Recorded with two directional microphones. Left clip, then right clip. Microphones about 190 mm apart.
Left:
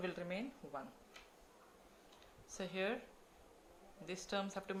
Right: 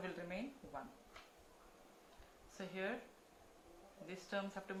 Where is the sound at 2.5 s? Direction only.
50° left (ahead or behind).